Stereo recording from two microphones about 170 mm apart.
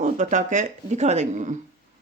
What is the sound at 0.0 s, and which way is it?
Speech, 45° right (ahead or behind).